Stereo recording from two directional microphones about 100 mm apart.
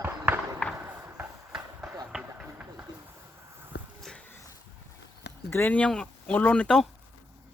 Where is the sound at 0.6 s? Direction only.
15° left (ahead or behind).